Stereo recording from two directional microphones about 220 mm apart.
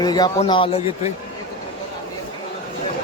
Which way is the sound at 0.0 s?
20° left (ahead or behind).